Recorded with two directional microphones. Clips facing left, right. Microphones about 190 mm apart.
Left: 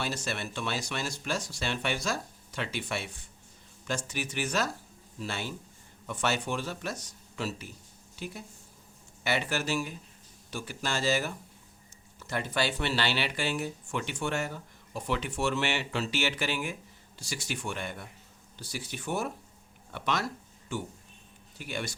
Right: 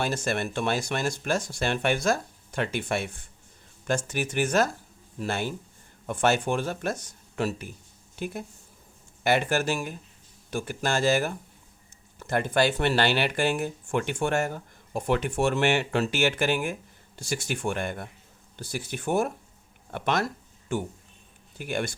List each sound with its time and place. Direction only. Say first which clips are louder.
0.0 s speech: right 6 dB; 50° right (ahead or behind)